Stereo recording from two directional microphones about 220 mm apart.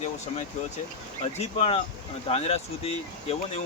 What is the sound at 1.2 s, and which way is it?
Speech, 30° left (ahead or behind).